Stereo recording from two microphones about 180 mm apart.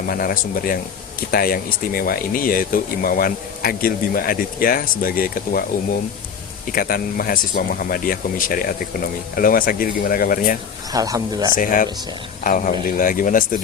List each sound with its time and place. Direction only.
0.1 s speech: 50° left (ahead or behind)
6.7 s speech: 55° left (ahead or behind)
10.9 s speech: 20° right (ahead or behind)
11.5 s speech: 50° left (ahead or behind)